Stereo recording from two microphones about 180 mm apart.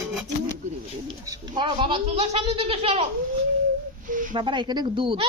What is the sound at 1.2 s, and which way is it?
Speech, 20° right (ahead or behind).